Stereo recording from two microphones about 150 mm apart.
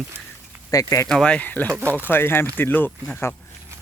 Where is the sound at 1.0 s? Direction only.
5° left (ahead or behind).